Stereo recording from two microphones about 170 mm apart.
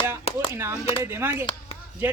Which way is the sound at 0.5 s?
15° right (ahead or behind).